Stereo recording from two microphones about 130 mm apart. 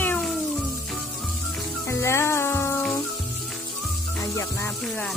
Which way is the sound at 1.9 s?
20° left (ahead or behind).